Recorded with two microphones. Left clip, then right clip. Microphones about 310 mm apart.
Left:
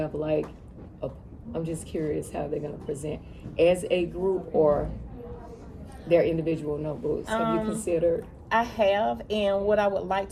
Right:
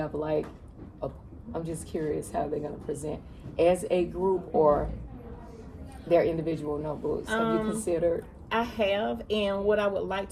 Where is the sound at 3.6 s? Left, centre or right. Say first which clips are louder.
Left 2 dB; centre.